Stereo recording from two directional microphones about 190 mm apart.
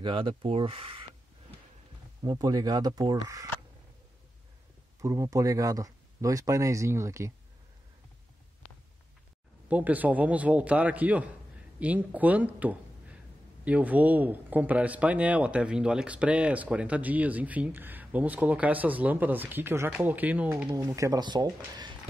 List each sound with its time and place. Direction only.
0.0 s speech: 25° right (ahead or behind)
2.2 s speech: 20° right (ahead or behind)
5.0 s a man's voice: 15° right (ahead or behind)
9.7 s a man's voice: 10° right (ahead or behind)